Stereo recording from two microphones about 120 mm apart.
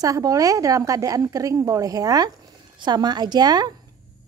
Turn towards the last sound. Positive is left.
turn(degrees=-35)  # may be behind; listen again after turning